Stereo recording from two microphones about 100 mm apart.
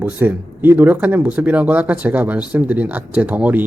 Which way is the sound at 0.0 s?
20° right (ahead or behind).